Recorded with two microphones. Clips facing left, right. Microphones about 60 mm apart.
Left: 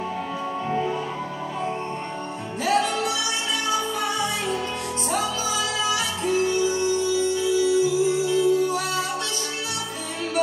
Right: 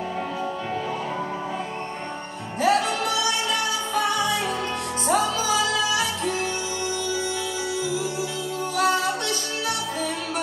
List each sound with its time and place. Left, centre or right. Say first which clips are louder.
2.6 s music: right 1 dB; right